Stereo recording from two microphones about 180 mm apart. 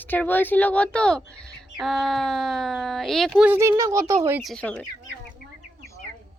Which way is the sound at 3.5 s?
15° right (ahead or behind).